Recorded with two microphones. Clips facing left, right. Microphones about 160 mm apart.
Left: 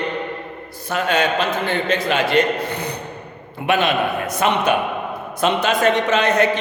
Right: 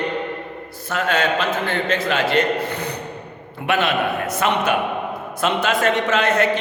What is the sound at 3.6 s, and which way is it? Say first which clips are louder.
Mantra: left 2 dB; 15° left (ahead or behind).